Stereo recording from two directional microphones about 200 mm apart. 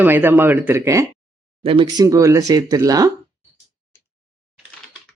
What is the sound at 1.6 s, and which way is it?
Speech, 25° right (ahead or behind).